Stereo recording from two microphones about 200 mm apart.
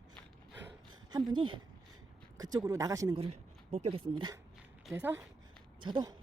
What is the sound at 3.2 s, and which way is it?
A woman's voice, 30° right (ahead or behind).